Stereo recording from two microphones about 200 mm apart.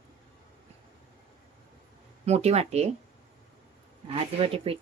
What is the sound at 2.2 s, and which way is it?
Speech, 30° right (ahead or behind).